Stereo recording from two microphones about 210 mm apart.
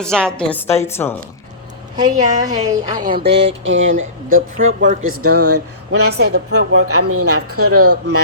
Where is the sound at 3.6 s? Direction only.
65° right (ahead or behind).